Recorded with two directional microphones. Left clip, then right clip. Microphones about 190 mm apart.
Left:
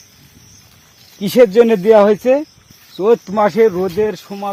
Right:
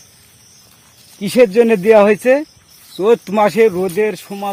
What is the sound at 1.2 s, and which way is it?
Speech, 20° left (ahead or behind).